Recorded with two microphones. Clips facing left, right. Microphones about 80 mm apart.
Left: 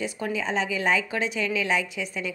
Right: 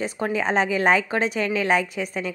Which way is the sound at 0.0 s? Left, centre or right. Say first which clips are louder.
Right 4 dB; right.